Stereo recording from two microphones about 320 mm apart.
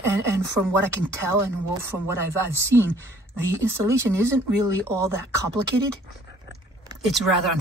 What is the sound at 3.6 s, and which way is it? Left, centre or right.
A woman's voice, centre.